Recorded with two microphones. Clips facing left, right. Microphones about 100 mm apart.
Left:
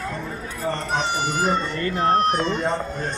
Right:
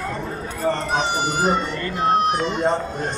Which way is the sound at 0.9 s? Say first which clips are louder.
Right 2 dB; 10° right (ahead or behind).